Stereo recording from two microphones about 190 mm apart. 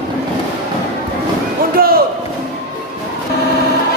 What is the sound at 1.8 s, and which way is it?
Basketball bounce, 50° right (ahead or behind).